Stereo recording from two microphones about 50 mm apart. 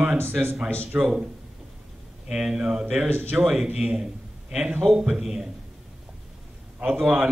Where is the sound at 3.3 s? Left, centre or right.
Centre.